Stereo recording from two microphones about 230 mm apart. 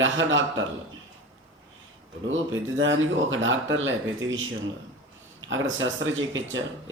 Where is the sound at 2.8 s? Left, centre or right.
Right.